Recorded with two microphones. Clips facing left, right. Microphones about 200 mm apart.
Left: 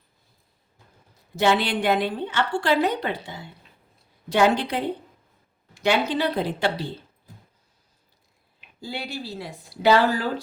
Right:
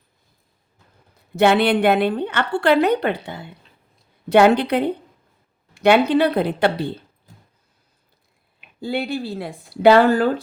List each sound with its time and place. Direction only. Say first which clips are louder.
1.4 s a woman's voice: right 6 dB; 60° right (ahead or behind)
8.8 s speech: right 9 dB; 55° right (ahead or behind)